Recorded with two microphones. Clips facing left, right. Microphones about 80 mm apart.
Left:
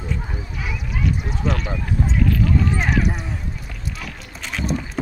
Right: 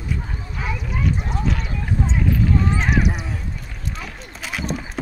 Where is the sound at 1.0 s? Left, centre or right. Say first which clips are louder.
Left 1 dB; centre.